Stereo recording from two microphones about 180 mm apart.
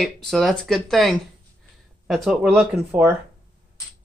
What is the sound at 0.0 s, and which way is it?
Speech, centre (ahead or behind).